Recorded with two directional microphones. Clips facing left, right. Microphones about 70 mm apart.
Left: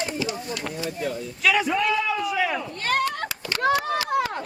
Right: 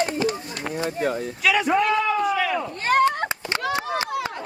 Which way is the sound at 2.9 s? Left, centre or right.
Right.